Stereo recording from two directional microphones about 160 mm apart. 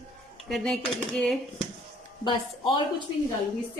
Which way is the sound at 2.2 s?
30° left (ahead or behind).